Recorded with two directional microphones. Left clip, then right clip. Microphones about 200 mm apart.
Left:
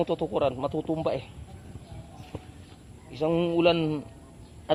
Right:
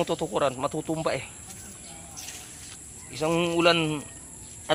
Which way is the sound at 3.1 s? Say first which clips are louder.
Even; 10° left (ahead or behind).